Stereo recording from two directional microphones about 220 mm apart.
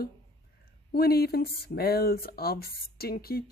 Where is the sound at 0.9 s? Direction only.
45° left (ahead or behind).